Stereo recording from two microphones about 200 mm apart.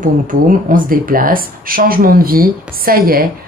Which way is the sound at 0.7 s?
45° right (ahead or behind).